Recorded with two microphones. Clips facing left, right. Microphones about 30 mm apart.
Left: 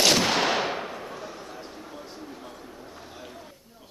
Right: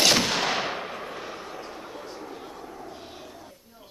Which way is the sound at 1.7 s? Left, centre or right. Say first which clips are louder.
Right 3 dB; centre.